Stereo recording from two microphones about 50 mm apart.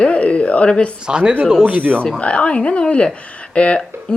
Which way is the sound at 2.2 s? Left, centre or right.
Left.